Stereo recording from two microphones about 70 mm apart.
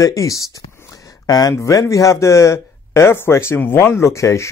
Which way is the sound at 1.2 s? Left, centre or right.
Left.